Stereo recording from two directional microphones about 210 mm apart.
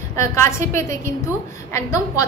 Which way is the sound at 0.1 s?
15° left (ahead or behind).